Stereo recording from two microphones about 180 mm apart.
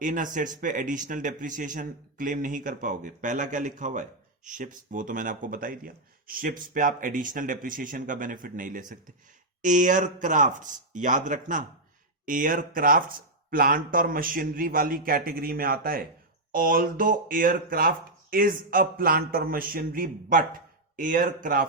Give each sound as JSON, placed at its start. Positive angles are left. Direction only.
{"t": 0.0, "sound": "speech", "side_deg": -45}